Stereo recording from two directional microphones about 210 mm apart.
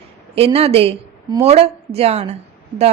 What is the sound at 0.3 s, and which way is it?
A woman's voice, 30° right (ahead or behind).